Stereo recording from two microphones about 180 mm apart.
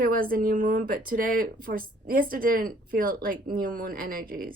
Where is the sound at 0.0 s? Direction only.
55° right (ahead or behind).